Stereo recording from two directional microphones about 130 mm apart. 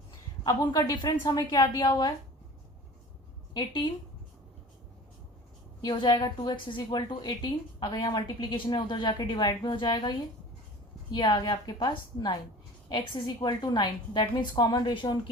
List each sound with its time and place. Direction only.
0.4 s a woman's voice: 30° left (ahead or behind)
3.5 s a woman's voice: 35° left (ahead or behind)
5.8 s a woman's voice: 35° left (ahead or behind)